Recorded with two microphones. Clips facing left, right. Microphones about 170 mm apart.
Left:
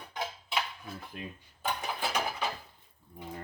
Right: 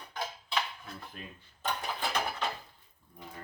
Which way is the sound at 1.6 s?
5° left (ahead or behind).